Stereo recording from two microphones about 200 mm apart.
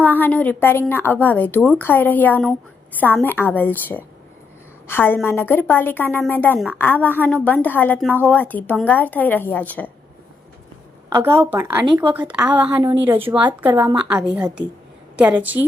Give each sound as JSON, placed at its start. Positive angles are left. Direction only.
{"t": 0.0, "sound": "a woman's voice", "side_deg": 10}
{"t": 11.1, "sound": "a woman's voice", "side_deg": -10}
{"t": 11.9, "sound": "a woman's voice", "side_deg": -25}
{"t": 12.3, "sound": "a woman's voice", "side_deg": -5}
{"t": 13.1, "sound": "a woman's voice", "side_deg": -25}
{"t": 13.6, "sound": "a woman's voice", "side_deg": -10}